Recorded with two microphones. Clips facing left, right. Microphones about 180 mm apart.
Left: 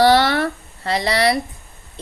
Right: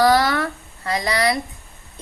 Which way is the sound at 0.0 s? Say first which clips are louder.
Left 2 dB; 30° left (ahead or behind).